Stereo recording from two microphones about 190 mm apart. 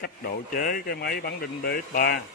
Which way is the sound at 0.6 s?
50° left (ahead or behind).